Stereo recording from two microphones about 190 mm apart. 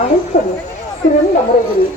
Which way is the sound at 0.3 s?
40° left (ahead or behind).